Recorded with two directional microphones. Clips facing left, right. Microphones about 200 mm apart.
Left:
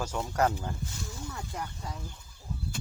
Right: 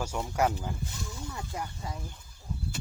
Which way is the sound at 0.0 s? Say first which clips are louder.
Even; 10° right (ahead or behind).